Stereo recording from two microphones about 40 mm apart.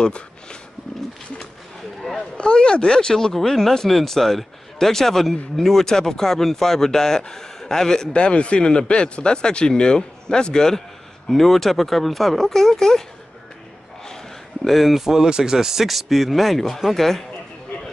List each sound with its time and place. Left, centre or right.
0.0 s speech: left
2.1 s speech: left
3.3 s speech: centre
8.1 s speech: left
11.2 s speech: centre
14.6 s speech: centre
15.0 s speech: centre